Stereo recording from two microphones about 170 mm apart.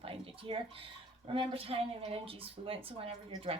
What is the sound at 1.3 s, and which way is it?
Speech, 35° right (ahead or behind).